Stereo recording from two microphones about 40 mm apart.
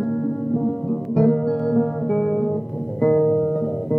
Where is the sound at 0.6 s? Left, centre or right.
Centre.